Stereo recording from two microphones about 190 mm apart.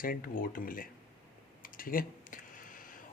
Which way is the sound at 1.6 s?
45° left (ahead or behind).